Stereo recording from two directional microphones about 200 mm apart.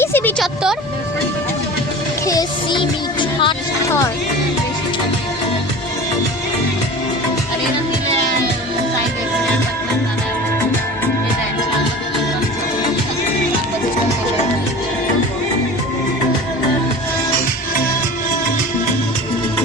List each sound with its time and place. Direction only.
0.0 s music: 10° left (ahead or behind)
2.2 s music: 20° left (ahead or behind)